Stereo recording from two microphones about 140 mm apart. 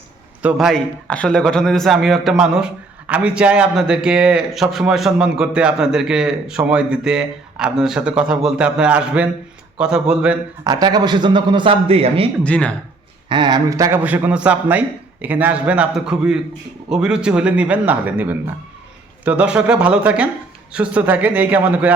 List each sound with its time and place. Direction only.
0.4 s a man's voice: centre (ahead or behind)
10.6 s a man's voice: 30° right (ahead or behind); by 12.3 s 45° right (ahead or behind)
12.4 s speech: 10° left (ahead or behind)
13.2 s speech: 35° right (ahead or behind)
13.7 s a man's voice: 25° right (ahead or behind)
14.0 s a man's voice: 10° right (ahead or behind)